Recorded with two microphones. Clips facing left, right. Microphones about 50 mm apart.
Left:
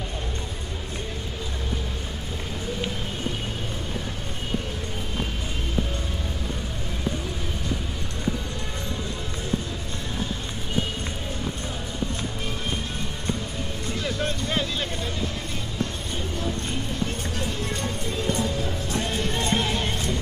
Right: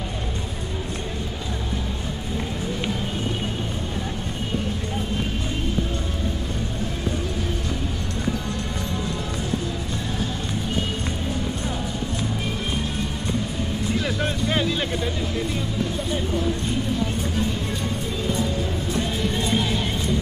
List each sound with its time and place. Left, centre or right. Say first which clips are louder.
14.2 s music: right 2 dB; right
19.0 s music: right 1 dB; left